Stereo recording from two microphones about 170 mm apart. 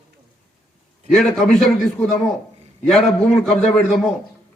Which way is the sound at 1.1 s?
5° left (ahead or behind).